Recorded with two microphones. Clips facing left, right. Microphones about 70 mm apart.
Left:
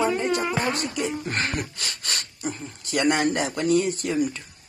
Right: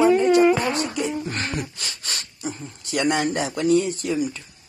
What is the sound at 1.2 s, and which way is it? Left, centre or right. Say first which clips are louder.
Speech: left 1 dB; left.